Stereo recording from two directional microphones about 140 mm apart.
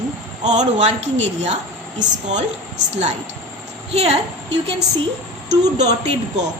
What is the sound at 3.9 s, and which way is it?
Speech, 50° right (ahead or behind).